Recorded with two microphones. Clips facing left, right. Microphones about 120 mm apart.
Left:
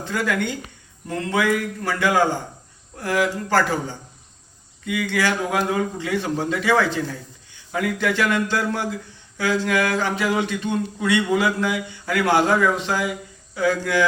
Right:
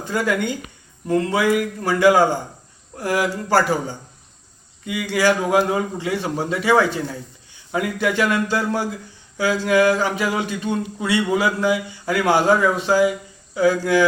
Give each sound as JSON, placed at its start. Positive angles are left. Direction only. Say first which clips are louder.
{"t": 0.0, "sound": "speech", "louder": "right 2 dB", "side_deg": -15}
{"t": 4.9, "sound": "speech", "louder": "right 3 dB", "side_deg": -15}